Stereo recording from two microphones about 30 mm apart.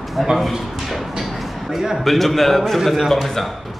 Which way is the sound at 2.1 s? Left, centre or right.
Centre.